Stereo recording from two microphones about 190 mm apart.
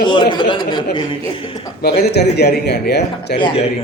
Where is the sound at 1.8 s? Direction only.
60° left (ahead or behind).